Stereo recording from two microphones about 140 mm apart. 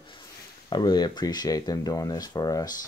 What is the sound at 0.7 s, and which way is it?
Speech, 30° left (ahead or behind).